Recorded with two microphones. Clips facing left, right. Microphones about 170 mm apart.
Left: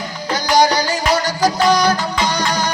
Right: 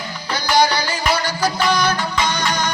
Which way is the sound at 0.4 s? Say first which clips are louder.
Left 3 dB; 45° left (ahead or behind).